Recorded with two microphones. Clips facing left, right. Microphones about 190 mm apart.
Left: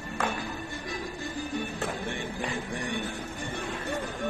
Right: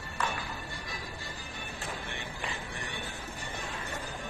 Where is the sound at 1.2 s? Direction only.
50° left (ahead or behind).